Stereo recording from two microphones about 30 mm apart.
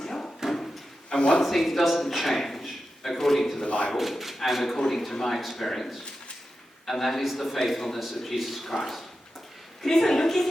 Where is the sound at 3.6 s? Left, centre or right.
Left.